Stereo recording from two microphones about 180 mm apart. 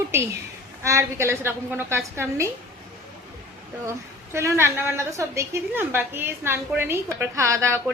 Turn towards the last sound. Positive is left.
turn(degrees=-15)  # may be behind; listen again after turning